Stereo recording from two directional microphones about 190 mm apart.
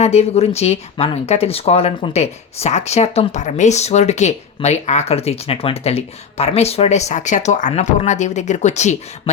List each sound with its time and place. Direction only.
0.0 s speech: 35° left (ahead or behind)